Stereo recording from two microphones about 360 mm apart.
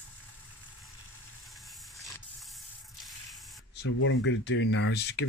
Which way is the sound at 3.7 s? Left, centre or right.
Left.